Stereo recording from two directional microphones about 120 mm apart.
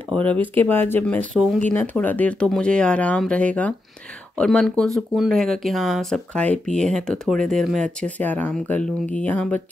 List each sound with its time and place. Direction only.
0.1 s speech: 10° left (ahead or behind)
1.3 s speech: 5° left (ahead or behind)
1.7 s speech: 15° left (ahead or behind)